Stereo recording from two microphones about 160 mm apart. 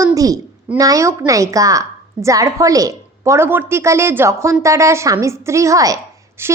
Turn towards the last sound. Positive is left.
turn(degrees=-15)  # may be behind; listen again after turning